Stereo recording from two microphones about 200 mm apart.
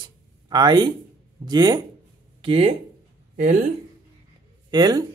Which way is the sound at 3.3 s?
40° right (ahead or behind).